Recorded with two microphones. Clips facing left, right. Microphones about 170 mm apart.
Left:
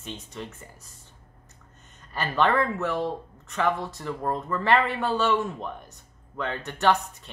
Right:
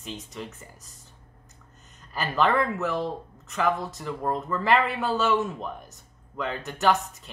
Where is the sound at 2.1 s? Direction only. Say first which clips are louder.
Even; centre (ahead or behind).